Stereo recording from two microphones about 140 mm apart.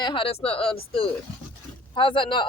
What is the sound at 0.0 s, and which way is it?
Speech, 40° left (ahead or behind).